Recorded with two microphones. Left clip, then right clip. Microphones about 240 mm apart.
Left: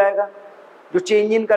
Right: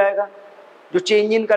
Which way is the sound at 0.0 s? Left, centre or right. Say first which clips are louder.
Left 1 dB; right.